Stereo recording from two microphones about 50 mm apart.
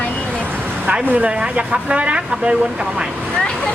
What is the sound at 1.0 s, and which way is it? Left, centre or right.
Speech, right.